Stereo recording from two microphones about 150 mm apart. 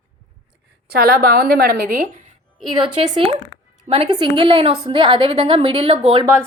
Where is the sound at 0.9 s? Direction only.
90° right.